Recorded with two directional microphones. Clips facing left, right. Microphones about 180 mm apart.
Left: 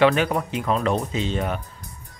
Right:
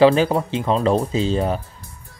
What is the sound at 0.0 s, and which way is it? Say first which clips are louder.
Speech: right 4 dB; 30° right (ahead or behind).